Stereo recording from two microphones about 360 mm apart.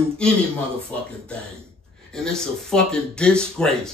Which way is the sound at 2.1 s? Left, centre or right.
Centre.